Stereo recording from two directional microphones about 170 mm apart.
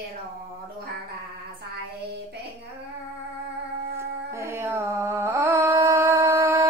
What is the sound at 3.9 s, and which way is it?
Music, 15° right (ahead or behind).